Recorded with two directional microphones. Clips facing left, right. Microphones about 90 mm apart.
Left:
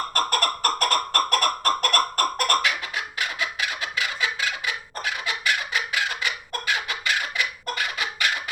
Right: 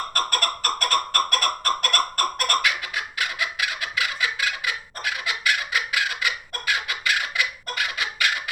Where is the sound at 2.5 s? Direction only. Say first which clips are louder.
Left 1 dB; 30° left (ahead or behind).